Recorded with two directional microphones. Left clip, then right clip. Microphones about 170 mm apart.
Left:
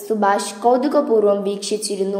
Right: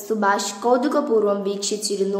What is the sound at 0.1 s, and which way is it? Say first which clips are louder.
A woman's voice: left 3 dB; 10° left (ahead or behind).